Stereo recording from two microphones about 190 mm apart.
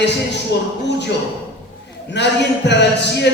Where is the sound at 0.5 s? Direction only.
60° left (ahead or behind).